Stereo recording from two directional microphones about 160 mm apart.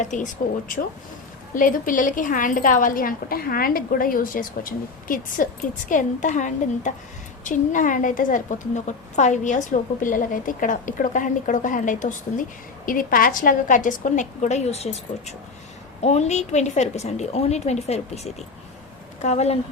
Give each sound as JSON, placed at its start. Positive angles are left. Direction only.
{"t": 0.0, "sound": "a woman's voice", "side_deg": 50}
{"t": 1.5, "sound": "a woman's voice", "side_deg": 60}